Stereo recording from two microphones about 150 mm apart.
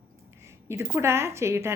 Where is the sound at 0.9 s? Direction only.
15° right (ahead or behind).